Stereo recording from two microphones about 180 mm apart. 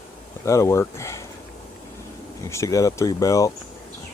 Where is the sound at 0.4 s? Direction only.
15° left (ahead or behind).